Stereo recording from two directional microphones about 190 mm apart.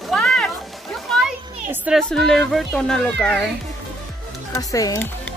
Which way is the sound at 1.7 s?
5° right (ahead or behind).